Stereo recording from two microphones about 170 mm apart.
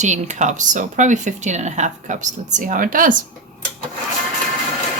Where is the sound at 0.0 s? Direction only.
45° right (ahead or behind).